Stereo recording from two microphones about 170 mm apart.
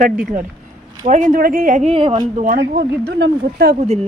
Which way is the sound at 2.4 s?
55° right (ahead or behind).